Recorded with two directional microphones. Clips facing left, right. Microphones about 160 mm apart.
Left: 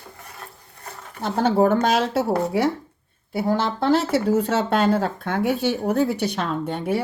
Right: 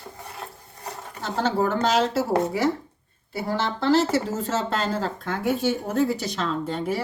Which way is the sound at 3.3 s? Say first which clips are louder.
Left 4 dB; 55° left (ahead or behind).